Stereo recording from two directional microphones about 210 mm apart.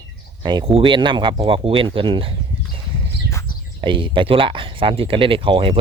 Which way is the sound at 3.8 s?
25° right (ahead or behind).